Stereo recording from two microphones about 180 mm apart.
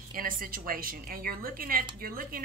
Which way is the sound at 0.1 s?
50° right (ahead or behind).